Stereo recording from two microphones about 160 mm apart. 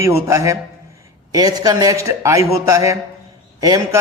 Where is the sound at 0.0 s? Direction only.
15° right (ahead or behind).